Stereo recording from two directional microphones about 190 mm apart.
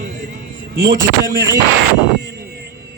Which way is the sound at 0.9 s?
50° right (ahead or behind).